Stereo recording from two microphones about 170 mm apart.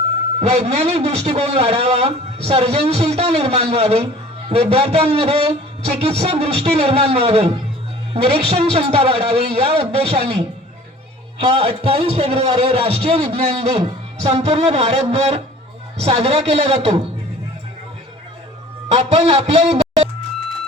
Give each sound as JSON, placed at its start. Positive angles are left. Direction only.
{"t": 0.3, "sound": "a man's voice", "side_deg": -40}
{"t": 18.9, "sound": "a man's voice", "side_deg": -40}